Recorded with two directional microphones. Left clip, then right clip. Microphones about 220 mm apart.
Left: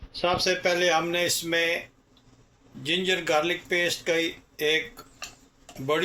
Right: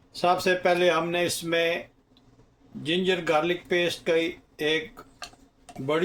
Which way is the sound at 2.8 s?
45° right (ahead or behind).